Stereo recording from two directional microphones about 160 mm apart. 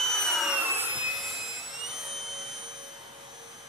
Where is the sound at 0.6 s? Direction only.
15° right (ahead or behind).